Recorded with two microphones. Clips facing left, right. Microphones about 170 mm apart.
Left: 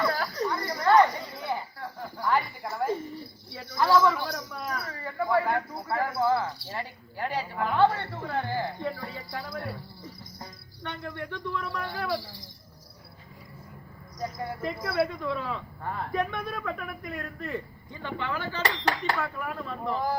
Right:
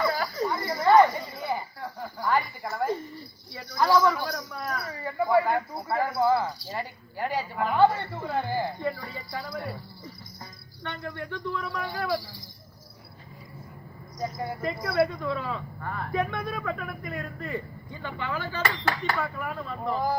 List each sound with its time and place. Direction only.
0.0 s a sound: 5° right (ahead or behind)
2.7 s cricket: centre (ahead or behind)
3.5 s a sound: 5° left (ahead or behind)
5.9 s a man's voice: 5° right (ahead or behind)
6.1 s speech: 20° right (ahead or behind)
6.7 s a man's voice: 5° right (ahead or behind)
14.2 s a man's voice: 5° right (ahead or behind)
15.8 s speech: 25° left (ahead or behind)
16.1 s a man's voice: 5° right (ahead or behind)
18.6 s a sound: 35° left (ahead or behind)
19.1 s a man's voice: centre (ahead or behind)